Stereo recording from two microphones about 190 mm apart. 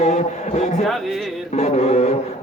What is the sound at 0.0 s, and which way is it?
A man's voice, 35° left (ahead or behind).